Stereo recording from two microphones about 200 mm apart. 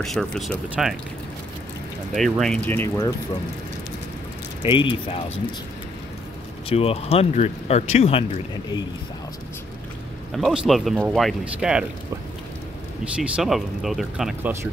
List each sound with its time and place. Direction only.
0.0 s speech: centre (ahead or behind)
2.1 s speech: centre (ahead or behind)
4.6 s speech: 25° left (ahead or behind)
6.7 s speech: 30° left (ahead or behind)
10.3 s speech: centre (ahead or behind)
13.2 s speech: centre (ahead or behind)